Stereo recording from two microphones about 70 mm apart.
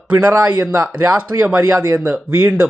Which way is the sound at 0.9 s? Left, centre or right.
Right.